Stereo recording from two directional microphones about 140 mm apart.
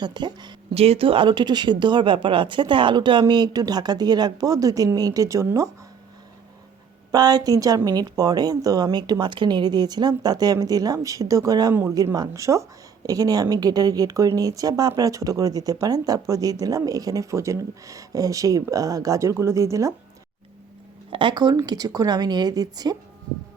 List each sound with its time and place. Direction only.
0.0 s speech: 30° right (ahead or behind)
0.7 s speech: 45° right (ahead or behind); by 5.7 s 20° right (ahead or behind)
7.1 s speech: 30° right (ahead or behind)
21.1 s speech: 35° right (ahead or behind)